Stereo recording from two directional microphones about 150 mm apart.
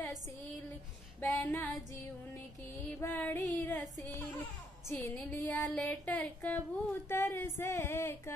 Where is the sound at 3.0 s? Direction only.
15° left (ahead or behind).